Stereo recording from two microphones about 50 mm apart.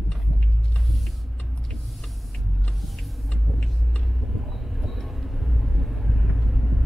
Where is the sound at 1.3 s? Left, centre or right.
Left.